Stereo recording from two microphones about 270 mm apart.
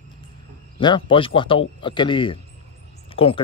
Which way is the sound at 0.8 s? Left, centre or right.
Centre.